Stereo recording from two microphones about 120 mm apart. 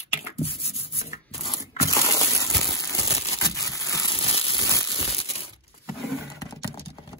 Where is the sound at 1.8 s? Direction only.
25° left (ahead or behind).